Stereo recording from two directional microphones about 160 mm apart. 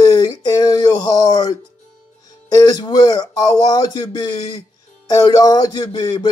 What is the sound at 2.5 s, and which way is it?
Speech, 25° left (ahead or behind).